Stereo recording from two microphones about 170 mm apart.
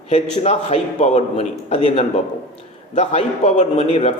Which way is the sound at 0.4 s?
40° left (ahead or behind).